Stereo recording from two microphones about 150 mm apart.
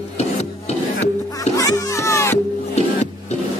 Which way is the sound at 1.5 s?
20° left (ahead or behind).